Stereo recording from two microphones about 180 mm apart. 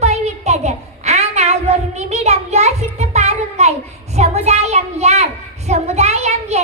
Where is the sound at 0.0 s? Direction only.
40° right (ahead or behind).